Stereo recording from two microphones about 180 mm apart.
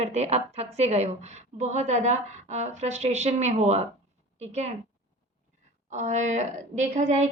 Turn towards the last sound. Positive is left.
turn(degrees=-40)  # may be behind; listen again after turning